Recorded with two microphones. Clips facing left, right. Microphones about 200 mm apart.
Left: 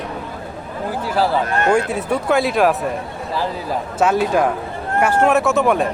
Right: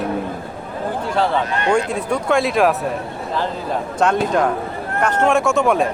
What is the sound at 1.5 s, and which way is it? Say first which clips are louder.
Speech: left 2 dB; 50° left (ahead or behind).